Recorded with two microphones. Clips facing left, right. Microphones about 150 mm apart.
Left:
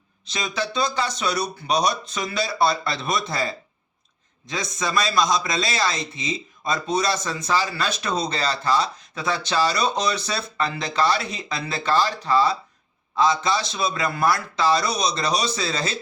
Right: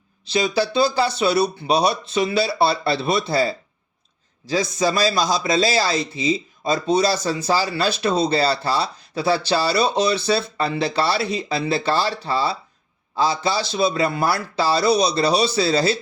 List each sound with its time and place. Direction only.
0.3 s speech: 30° right (ahead or behind)